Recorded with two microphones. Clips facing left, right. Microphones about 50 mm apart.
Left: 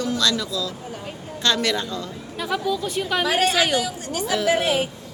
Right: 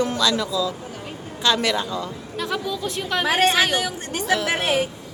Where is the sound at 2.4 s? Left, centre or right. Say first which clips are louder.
Left 2 dB; centre.